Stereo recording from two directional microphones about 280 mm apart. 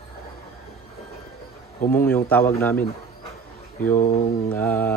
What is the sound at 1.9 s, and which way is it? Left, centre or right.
Speech, centre.